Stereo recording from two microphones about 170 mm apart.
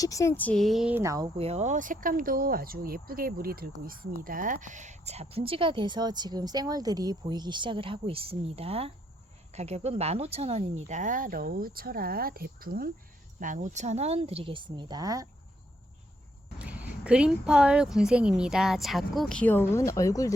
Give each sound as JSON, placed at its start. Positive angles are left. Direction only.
{"t": 0.0, "sound": "speech", "side_deg": 20}
{"t": 1.4, "sound": "speech", "side_deg": -40}
{"t": 13.4, "sound": "speech", "side_deg": -50}
{"t": 16.6, "sound": "speech", "side_deg": -10}